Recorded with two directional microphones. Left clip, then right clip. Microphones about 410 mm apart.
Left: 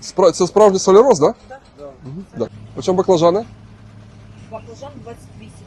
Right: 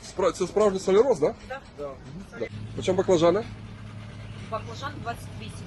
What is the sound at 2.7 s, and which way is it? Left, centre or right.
Speech, left.